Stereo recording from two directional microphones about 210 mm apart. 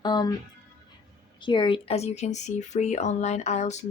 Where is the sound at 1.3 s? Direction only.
20° left (ahead or behind).